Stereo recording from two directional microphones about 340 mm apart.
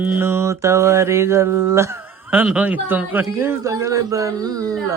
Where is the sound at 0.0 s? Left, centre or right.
Centre.